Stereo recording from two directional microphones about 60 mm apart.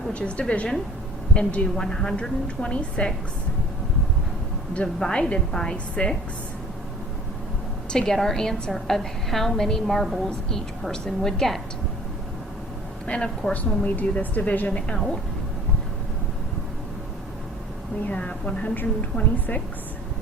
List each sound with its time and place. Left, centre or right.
0.1 s a woman's voice: centre
1.7 s a woman's voice: centre
4.7 s a woman's voice: centre
7.9 s a woman's voice: centre
13.1 s a woman's voice: centre
13.5 s a woman's voice: left
18.0 s a woman's voice: left